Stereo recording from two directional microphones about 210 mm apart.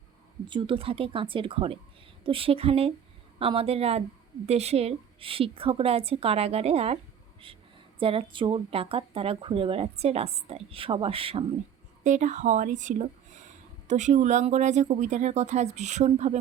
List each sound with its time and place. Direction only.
0.4 s speech: 25° right (ahead or behind)